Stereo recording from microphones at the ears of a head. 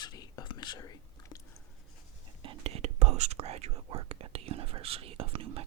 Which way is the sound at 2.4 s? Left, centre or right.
Right.